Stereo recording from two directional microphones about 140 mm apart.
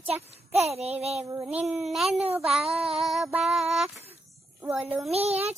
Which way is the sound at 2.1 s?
45° right (ahead or behind).